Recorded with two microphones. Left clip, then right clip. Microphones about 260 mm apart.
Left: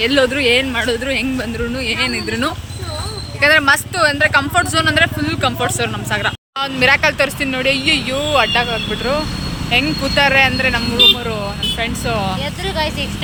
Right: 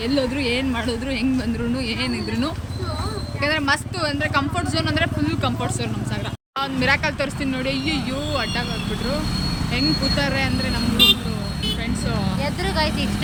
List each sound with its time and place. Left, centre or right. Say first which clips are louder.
0.0 s speech: left 9 dB; centre
9.7 s speech: left 7 dB; centre
12.6 s speech: left 3 dB; left